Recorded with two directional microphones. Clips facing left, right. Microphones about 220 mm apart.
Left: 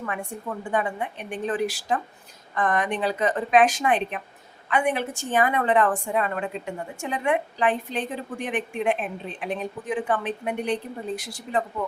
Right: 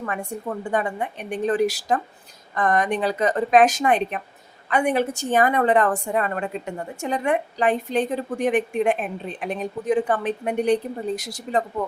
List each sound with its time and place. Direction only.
0.0 s a woman's voice: 40° right (ahead or behind)